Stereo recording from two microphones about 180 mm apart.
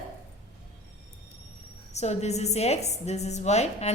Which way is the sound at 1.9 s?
40° left (ahead or behind).